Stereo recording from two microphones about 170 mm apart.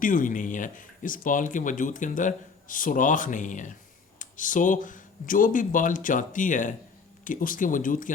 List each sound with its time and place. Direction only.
0.0 s speech: 50° left (ahead or behind)